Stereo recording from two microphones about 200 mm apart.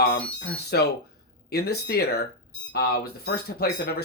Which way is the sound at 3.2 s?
50° left (ahead or behind).